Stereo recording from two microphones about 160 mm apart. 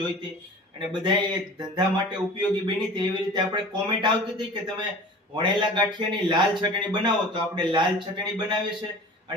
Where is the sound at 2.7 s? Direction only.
30° right (ahead or behind).